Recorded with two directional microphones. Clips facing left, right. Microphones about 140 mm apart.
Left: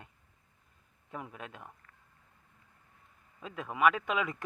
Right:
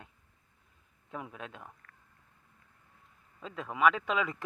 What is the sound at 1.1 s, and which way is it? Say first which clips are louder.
Speech: right 1 dB; centre (ahead or behind).